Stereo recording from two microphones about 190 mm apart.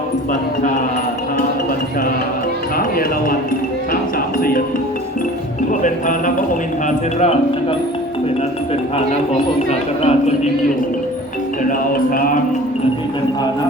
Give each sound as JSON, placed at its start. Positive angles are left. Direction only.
{"t": 4.4, "sound": "speech", "side_deg": 50}
{"t": 5.8, "sound": "speech", "side_deg": 45}
{"t": 9.3, "sound": "speech", "side_deg": 35}